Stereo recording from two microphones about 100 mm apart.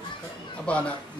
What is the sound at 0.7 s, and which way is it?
Speech, 10° left (ahead or behind).